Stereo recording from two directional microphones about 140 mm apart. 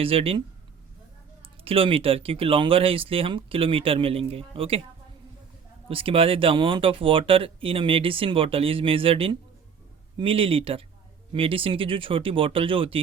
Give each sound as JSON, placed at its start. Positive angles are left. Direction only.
{"t": 0.0, "sound": "speech", "side_deg": -40}
{"t": 5.9, "sound": "speech", "side_deg": -40}